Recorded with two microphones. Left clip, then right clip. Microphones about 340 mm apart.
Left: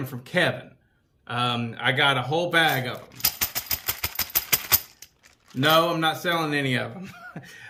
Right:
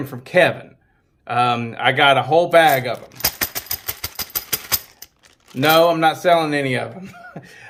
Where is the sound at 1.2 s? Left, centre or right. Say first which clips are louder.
Right 8 dB; centre.